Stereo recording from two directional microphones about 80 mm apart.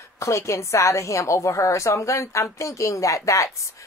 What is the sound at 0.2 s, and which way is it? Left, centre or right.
Speech, left.